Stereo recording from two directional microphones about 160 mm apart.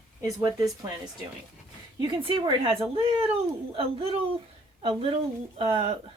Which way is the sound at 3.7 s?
35° right (ahead or behind).